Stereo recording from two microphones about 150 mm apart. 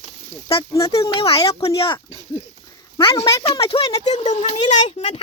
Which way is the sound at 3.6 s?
40° left (ahead or behind).